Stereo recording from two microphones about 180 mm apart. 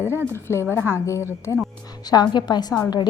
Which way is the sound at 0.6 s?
10° right (ahead or behind).